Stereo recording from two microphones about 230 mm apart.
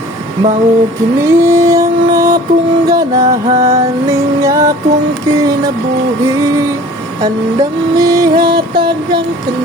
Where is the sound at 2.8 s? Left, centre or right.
Centre.